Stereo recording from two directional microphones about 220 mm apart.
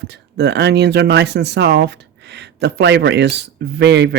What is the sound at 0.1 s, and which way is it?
Speech, 50° right (ahead or behind).